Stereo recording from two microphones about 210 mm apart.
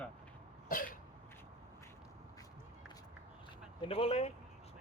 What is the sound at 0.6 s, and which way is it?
Cough, 40° left (ahead or behind).